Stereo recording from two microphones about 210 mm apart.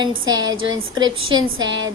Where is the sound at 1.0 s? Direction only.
70° right (ahead or behind).